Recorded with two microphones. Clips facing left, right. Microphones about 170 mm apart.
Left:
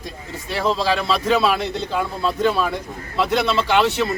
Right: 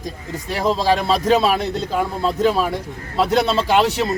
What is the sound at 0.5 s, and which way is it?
A man's voice, 40° right (ahead or behind).